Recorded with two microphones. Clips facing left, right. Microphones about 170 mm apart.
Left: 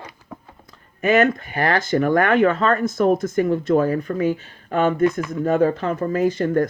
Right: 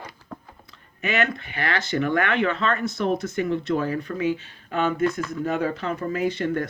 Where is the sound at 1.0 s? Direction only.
45° left (ahead or behind).